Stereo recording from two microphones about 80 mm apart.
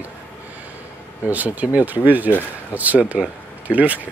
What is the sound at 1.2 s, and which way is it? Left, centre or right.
Speech, right.